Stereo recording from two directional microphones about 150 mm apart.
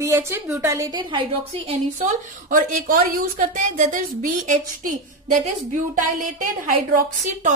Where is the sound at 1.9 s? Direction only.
60° right (ahead or behind).